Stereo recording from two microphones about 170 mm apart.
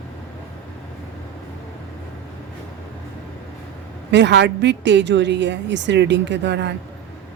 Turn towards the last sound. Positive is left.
turn(degrees=-90)